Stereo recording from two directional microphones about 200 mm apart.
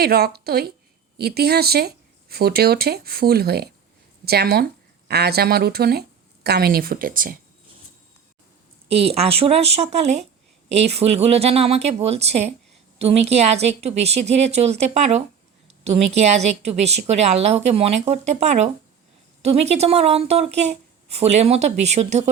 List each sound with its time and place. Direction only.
0.0 s a woman's voice: 50° right (ahead or behind)
9.0 s a woman's voice: 30° right (ahead or behind)